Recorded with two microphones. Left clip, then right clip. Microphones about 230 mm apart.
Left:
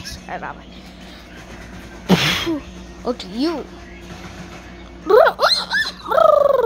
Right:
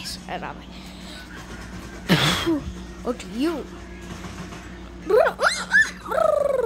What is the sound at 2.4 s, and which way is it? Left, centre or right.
Speech, centre.